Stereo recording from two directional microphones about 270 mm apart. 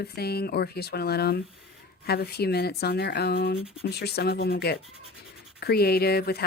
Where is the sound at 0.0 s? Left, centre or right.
Left.